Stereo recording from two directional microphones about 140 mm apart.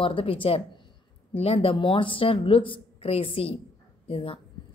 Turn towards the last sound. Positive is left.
turn(degrees=40)  # may be behind; listen again after turning